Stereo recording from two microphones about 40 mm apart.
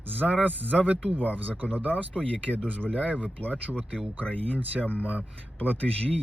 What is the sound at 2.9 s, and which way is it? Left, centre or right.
Speech, right.